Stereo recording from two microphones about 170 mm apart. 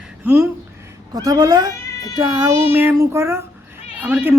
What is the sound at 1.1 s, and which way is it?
Speech, 20° right (ahead or behind).